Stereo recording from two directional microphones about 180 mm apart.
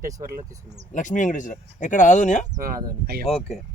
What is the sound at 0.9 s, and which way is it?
Speech, 45° left (ahead or behind).